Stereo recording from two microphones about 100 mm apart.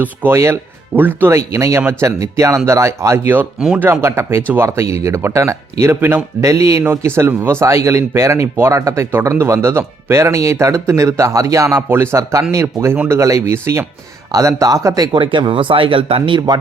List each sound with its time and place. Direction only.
0.0 s speech: 20° right (ahead or behind)
3.6 s speech: 10° right (ahead or behind)
3.8 s speech: 25° right (ahead or behind)
15.2 s speech: 55° right (ahead or behind)